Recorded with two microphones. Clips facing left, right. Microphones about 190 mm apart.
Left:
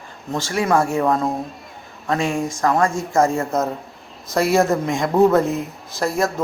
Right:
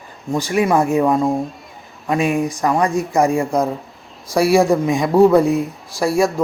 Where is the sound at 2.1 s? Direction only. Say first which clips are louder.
Right 3 dB; 15° right (ahead or behind).